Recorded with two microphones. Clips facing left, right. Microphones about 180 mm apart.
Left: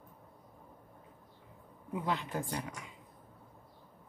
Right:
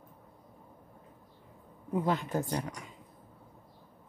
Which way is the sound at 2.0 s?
45° right (ahead or behind).